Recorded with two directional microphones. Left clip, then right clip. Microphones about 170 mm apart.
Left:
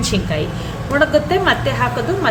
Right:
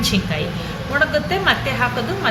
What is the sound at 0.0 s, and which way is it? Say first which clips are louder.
A woman's voice: left 1 dB; 40° left (ahead or behind).